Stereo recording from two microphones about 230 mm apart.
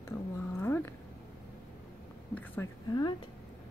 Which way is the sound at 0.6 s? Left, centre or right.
Centre.